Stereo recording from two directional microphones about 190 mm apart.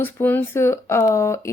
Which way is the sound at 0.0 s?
10° left (ahead or behind).